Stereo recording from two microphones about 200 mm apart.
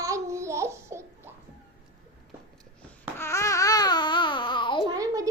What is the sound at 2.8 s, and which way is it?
Babbling, 10° left (ahead or behind).